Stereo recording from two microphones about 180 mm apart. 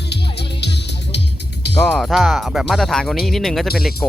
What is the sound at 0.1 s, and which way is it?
Music, 70° left (ahead or behind).